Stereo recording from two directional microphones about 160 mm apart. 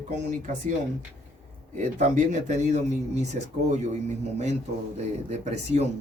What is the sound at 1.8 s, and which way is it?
A man's voice, 50° right (ahead or behind).